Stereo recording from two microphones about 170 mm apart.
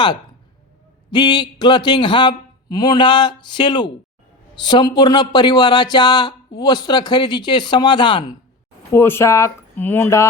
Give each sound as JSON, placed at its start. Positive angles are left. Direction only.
{"t": 1.1, "sound": "speech", "side_deg": 25}
{"t": 8.9, "sound": "speech", "side_deg": 15}